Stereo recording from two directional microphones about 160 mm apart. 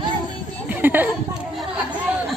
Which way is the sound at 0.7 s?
10° right (ahead or behind).